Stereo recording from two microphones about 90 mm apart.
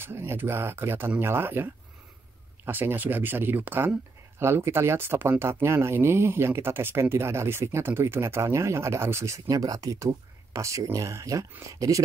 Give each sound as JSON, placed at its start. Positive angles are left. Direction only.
{"t": 0.0, "sound": "speech", "side_deg": -25}